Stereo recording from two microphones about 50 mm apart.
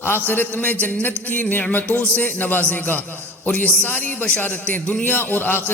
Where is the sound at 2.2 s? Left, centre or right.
Left.